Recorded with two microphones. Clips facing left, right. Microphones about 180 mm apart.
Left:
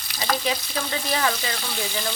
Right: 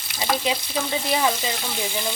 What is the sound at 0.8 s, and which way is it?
Speech, 10° right (ahead or behind).